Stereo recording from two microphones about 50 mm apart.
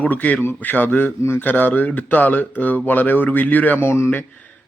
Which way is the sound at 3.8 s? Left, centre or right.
Left.